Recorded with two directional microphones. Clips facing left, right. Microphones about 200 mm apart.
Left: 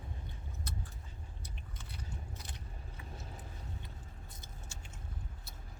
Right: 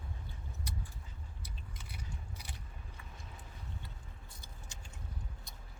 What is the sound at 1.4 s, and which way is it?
Biting, 10° right (ahead or behind).